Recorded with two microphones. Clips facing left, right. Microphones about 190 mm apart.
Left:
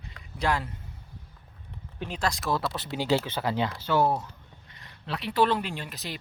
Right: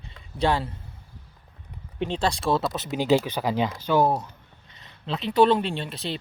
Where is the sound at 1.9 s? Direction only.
30° right (ahead or behind).